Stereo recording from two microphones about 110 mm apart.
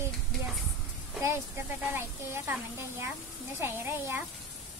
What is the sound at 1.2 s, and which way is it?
Speech, 25° right (ahead or behind).